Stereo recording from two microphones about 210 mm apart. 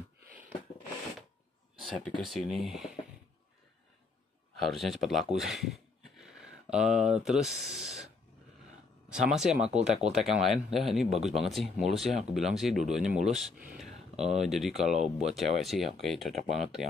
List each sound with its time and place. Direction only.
1.8 s speech: centre (ahead or behind)
4.6 s speech: centre (ahead or behind)
9.1 s speech: 5° right (ahead or behind)